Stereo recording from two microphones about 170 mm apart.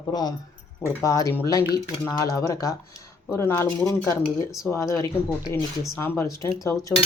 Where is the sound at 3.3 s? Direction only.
15° left (ahead or behind).